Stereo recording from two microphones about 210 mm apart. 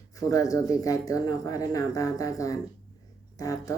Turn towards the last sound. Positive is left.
turn(degrees=15)  # may be behind; listen again after turning